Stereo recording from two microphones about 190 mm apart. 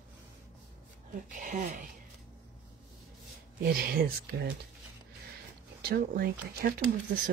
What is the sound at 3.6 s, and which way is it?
Speech, 55° right (ahead or behind).